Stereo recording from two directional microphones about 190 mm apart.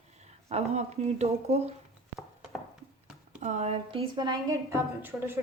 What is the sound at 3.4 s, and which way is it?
A woman's voice, 35° right (ahead or behind).